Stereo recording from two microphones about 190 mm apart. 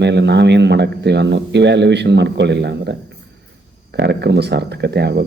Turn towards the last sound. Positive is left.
turn(degrees=-60)  # may be behind; listen again after turning